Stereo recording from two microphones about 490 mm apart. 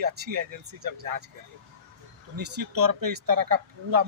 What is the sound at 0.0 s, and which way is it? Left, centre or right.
Speech, right.